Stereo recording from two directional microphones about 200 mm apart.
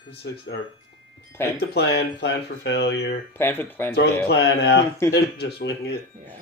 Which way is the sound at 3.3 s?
10° left (ahead or behind).